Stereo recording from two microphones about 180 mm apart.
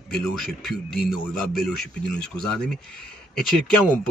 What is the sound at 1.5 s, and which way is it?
Speech, 60° left (ahead or behind).